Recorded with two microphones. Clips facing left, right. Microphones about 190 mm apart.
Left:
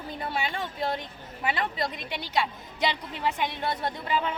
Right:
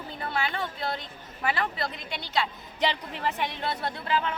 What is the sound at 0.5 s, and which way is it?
A woman's voice, 15° left (ahead or behind).